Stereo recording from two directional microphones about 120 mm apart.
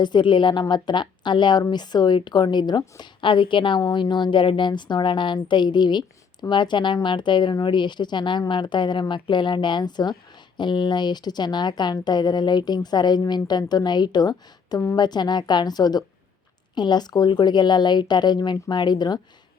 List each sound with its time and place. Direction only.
0.0 s a woman's voice: 40° left (ahead or behind)